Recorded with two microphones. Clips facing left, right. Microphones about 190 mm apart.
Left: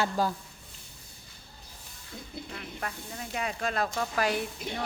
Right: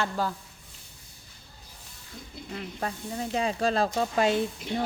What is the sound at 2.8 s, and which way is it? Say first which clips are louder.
Speech: right 8 dB; 30° right (ahead or behind).